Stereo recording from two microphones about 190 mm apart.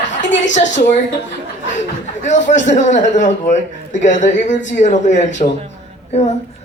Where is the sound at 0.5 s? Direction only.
40° left (ahead or behind).